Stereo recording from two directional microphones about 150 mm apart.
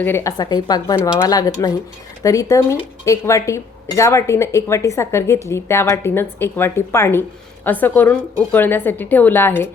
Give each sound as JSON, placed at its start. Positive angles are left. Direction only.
{"t": 0.0, "sound": "speech", "side_deg": 15}